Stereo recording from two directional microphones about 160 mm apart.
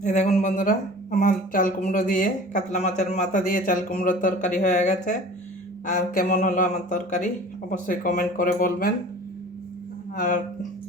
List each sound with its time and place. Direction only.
0.0 s speech: 50° left (ahead or behind)
10.2 s speech: 55° left (ahead or behind)